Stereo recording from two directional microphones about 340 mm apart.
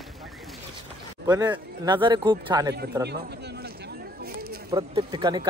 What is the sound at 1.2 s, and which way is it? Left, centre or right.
Speech, centre.